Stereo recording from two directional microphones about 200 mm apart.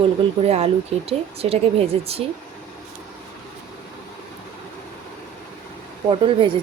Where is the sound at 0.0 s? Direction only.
30° right (ahead or behind).